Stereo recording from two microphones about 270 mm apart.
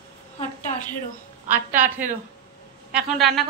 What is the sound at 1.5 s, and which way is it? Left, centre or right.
A woman's voice, centre.